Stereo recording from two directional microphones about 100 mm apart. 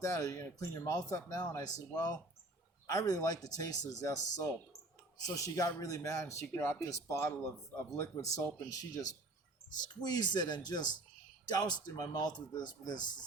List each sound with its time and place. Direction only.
0.0 s speech: 35° left (ahead or behind)